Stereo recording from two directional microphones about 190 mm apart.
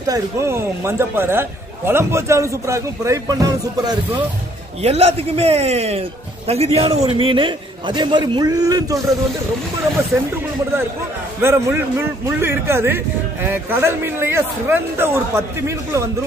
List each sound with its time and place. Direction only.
0.0 s a man's voice: 15° right (ahead or behind)
4.8 s a man's voice: 30° right (ahead or behind)
10.1 s a man's voice: 10° right (ahead or behind)
11.4 s a man's voice: 15° right (ahead or behind)